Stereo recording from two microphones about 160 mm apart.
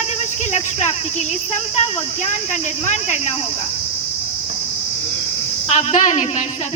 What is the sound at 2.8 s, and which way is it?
Speech, 45° left (ahead or behind).